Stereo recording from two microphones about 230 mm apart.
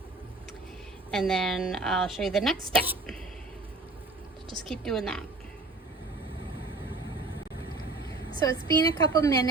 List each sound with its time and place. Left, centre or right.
1.1 s a woman's voice: centre
4.6 s a woman's voice: centre
8.4 s a woman's voice: centre